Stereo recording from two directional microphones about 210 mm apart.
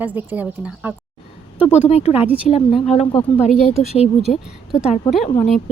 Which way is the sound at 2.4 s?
30° left (ahead or behind).